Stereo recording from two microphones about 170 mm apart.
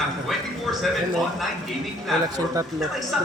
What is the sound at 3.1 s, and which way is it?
Speech, 5° right (ahead or behind).